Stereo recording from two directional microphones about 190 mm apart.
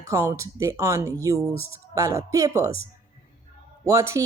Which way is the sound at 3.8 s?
15° right (ahead or behind).